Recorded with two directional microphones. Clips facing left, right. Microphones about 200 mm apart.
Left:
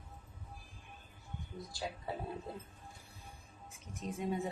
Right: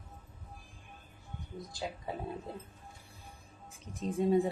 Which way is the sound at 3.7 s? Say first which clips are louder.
Right 5 dB; 30° right (ahead or behind).